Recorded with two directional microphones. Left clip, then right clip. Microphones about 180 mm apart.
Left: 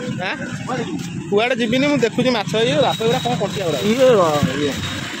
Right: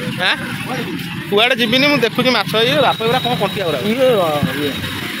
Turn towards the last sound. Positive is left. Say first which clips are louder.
# even
turn(degrees=15)  # may be behind; listen again after turning